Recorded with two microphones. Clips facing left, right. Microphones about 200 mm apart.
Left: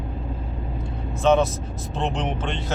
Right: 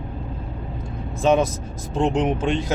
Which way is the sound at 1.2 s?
10° right (ahead or behind).